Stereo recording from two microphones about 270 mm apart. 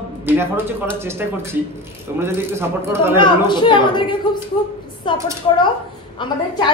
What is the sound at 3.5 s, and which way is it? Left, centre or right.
A woman's voice, centre.